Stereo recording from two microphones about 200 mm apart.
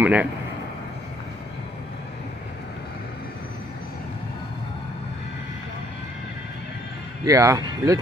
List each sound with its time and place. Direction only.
0.0 s a man's voice: 10° right (ahead or behind)
7.2 s speech: 15° right (ahead or behind)